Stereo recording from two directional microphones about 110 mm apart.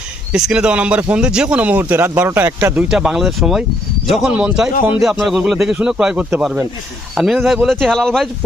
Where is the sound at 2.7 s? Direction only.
5° right (ahead or behind).